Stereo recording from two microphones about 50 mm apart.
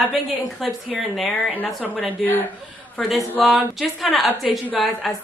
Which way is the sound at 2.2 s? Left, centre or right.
Left.